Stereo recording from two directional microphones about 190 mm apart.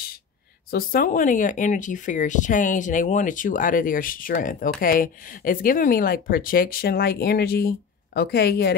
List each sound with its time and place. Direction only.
0.7 s speech: 50° left (ahead or behind)